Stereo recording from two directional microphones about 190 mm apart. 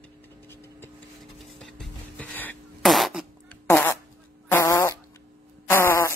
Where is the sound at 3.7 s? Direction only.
10° left (ahead or behind).